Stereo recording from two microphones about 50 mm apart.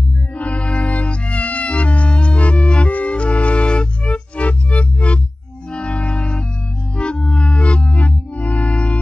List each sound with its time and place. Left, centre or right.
0.4 s music: left